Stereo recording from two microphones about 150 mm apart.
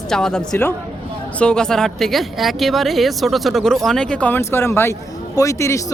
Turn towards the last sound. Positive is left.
turn(degrees=20)  # may be behind; listen again after turning